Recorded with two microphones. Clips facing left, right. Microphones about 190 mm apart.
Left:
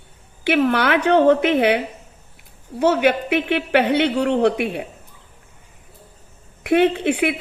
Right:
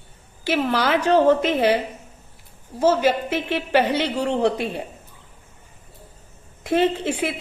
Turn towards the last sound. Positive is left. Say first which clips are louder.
# left 4 dB
turn(degrees=65)  # may be behind; listen again after turning